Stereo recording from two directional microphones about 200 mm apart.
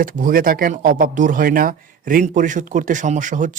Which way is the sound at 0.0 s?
45° right (ahead or behind).